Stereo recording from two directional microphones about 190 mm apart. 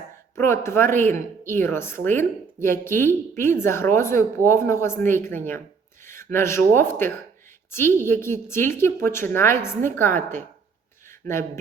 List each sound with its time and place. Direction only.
0.3 s a woman's voice: 15° left (ahead or behind)